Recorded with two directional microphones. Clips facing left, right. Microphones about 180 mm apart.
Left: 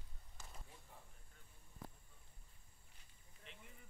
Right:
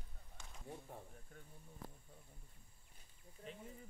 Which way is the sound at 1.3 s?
60° right (ahead or behind).